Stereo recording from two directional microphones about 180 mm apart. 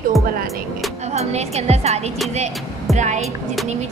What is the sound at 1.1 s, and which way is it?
A woman's voice, 35° right (ahead or behind).